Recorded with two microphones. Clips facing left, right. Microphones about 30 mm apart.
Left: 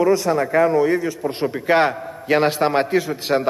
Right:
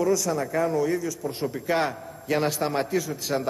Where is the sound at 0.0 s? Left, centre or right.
Left.